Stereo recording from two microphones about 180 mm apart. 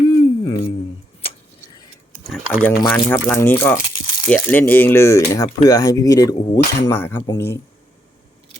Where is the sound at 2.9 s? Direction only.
10° left (ahead or behind).